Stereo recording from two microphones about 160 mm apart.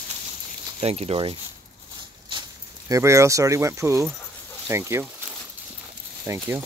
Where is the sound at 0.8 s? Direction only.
40° right (ahead or behind).